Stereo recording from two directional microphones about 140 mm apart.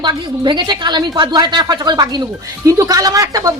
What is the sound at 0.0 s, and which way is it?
A woman's voice, 35° right (ahead or behind).